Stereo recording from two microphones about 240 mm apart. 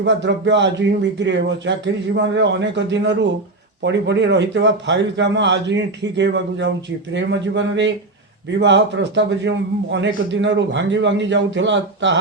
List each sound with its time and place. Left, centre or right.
0.0 s a man's voice: right